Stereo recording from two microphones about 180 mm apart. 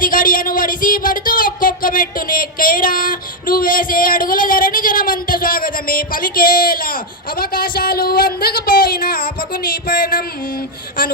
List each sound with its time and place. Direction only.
0.0 s speech: 50° left (ahead or behind)